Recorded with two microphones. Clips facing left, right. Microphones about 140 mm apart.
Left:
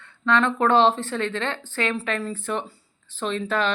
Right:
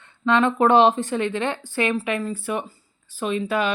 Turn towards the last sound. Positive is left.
turn(degrees=-10)  # may be behind; listen again after turning